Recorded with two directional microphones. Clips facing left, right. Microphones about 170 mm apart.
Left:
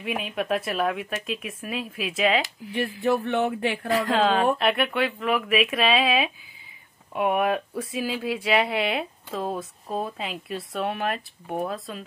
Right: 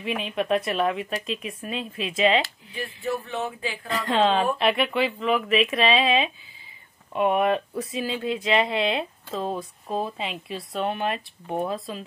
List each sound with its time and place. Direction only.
0.0 s speech: centre (ahead or behind)
2.7 s a sound: 65° left (ahead or behind)
4.0 s speech: centre (ahead or behind)